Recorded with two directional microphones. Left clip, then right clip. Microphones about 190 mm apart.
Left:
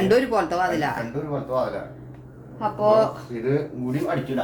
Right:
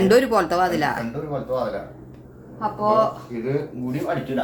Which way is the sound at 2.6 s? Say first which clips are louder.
Left 1 dB; 20° left (ahead or behind).